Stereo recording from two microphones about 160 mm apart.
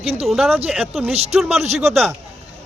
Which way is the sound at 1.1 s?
40° right (ahead or behind).